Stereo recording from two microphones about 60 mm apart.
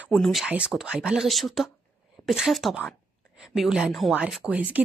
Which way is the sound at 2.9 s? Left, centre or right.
Centre.